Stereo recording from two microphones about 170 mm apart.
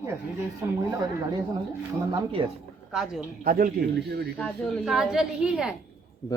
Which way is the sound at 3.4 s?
60° right (ahead or behind).